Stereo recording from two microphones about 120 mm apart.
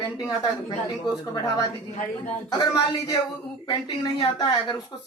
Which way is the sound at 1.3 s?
35° left (ahead or behind).